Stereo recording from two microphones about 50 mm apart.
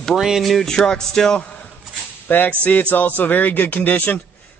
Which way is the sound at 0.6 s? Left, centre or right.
Centre.